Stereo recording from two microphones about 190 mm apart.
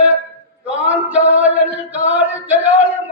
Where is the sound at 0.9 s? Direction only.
10° right (ahead or behind).